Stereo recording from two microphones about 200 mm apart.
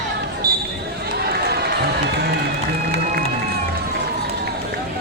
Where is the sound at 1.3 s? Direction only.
55° right (ahead or behind).